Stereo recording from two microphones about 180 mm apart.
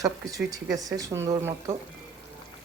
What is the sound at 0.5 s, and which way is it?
Speech, 20° right (ahead or behind).